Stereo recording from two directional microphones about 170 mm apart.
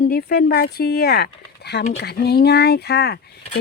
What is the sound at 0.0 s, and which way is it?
Speech, 65° left (ahead or behind).